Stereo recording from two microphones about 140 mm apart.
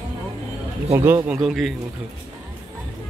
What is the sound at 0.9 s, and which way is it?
Speech, 20° right (ahead or behind).